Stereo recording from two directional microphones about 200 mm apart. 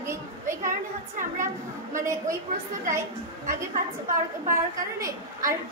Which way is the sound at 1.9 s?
15° right (ahead or behind).